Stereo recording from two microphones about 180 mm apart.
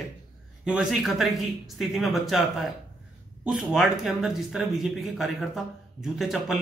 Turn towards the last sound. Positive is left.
turn(degrees=0)  # may be behind; listen again after turning